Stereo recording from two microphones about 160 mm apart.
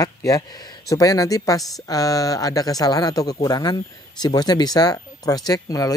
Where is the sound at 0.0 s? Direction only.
20° left (ahead or behind).